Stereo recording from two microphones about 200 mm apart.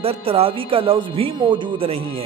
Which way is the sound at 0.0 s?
30° right (ahead or behind).